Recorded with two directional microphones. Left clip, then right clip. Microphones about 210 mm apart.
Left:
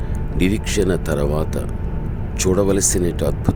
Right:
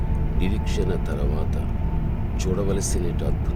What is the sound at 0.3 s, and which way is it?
Speech, 45° left (ahead or behind).